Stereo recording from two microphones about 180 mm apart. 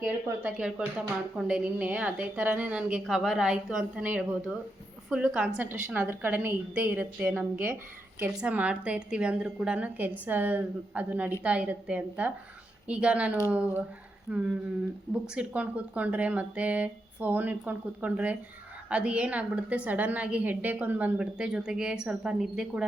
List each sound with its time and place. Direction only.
0.0 s speech: 10° right (ahead or behind)